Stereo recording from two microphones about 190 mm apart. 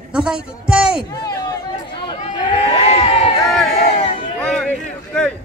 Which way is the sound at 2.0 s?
25° left (ahead or behind).